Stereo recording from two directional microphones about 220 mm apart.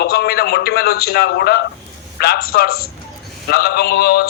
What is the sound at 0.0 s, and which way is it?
A man's voice, 45° left (ahead or behind).